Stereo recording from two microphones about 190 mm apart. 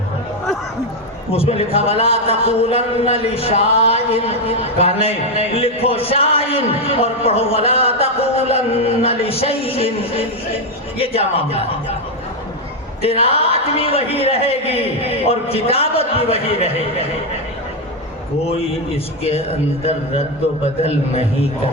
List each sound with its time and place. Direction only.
1.3 s a man's voice: 30° left (ahead or behind)
13.0 s a man's voice: 30° left (ahead or behind)
19.2 s a man's voice: 30° left (ahead or behind)